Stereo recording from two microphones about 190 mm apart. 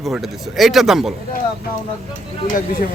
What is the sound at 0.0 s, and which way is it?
Speech, centre (ahead or behind).